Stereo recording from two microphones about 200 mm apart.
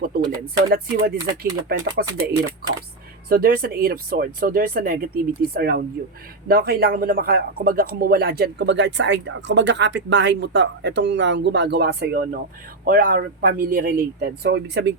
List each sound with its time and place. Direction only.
0.0 s speech: 50° right (ahead or behind)
3.2 s a man's voice: 50° right (ahead or behind)